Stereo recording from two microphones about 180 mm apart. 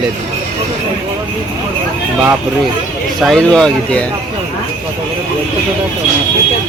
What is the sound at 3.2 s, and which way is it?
Speech, 5° left (ahead or behind).